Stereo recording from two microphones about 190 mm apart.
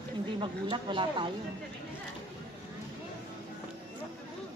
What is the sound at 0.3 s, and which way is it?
Speech, 25° right (ahead or behind).